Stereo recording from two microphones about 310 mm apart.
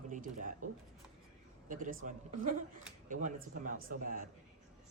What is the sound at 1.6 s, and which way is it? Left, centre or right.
Speech, right.